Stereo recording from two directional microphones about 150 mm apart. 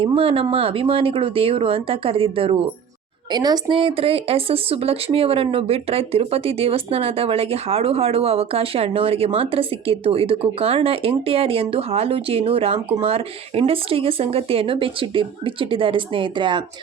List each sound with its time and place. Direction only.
0.0 s speech: 40° right (ahead or behind)